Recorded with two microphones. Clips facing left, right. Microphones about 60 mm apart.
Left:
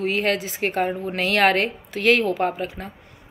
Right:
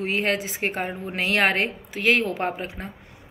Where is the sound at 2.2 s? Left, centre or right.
Right.